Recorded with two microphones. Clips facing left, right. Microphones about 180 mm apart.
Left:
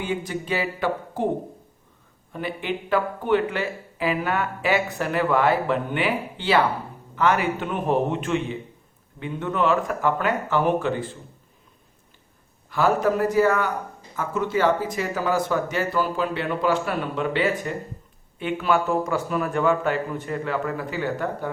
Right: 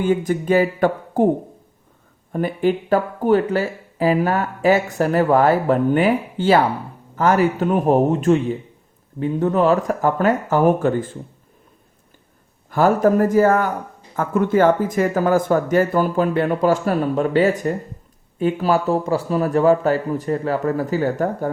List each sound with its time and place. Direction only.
0.0 s speech: 45° right (ahead or behind)
2.3 s speech: 45° right (ahead or behind)
12.7 s speech: 45° right (ahead or behind)